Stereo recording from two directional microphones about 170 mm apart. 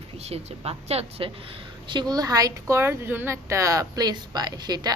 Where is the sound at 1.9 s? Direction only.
25° right (ahead or behind).